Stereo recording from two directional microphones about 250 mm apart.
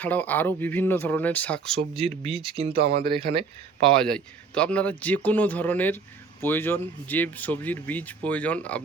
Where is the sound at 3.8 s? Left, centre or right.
Centre.